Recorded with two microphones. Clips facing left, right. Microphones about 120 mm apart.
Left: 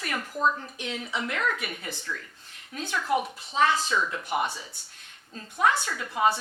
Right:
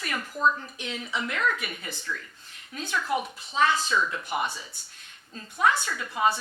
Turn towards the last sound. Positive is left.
turn(degrees=45)  # may be behind; listen again after turning